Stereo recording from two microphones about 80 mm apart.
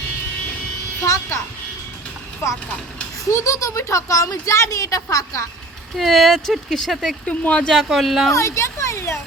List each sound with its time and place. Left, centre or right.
1.0 s a sound: left
3.3 s speech: left
6.0 s speech: centre
7.3 s speech: centre
7.7 s speech: centre
8.3 s speech: left